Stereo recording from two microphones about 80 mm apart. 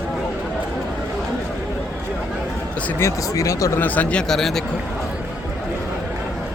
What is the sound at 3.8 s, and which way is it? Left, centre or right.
Speech, centre.